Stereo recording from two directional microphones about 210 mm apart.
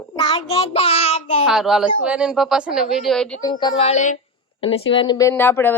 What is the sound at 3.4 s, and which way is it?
Speech, 20° left (ahead or behind).